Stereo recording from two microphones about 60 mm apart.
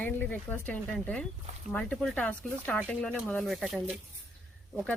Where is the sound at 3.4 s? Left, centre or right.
Centre.